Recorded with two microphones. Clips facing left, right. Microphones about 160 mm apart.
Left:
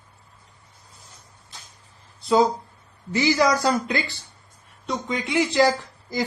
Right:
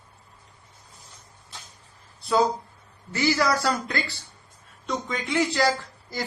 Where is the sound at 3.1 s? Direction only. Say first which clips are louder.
Left 3 dB; 20° left (ahead or behind).